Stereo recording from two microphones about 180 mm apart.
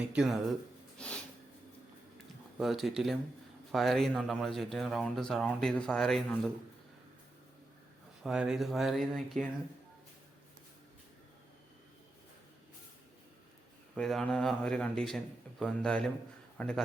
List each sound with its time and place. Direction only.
0.1 s speech: 5° right (ahead or behind)
0.9 s snort: 5° left (ahead or behind)
2.6 s speech: centre (ahead or behind)
8.2 s speech: 5° right (ahead or behind)
13.9 s a man's voice: 5° left (ahead or behind)